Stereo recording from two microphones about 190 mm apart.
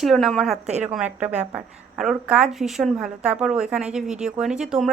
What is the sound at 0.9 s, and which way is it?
A woman's voice, 5° right (ahead or behind).